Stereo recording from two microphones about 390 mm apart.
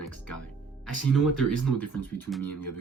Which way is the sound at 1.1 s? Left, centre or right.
Centre.